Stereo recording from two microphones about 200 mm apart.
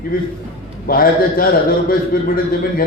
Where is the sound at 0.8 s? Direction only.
45° left (ahead or behind).